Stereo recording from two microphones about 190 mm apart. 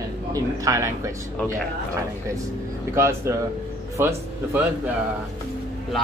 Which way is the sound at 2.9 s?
15° right (ahead or behind).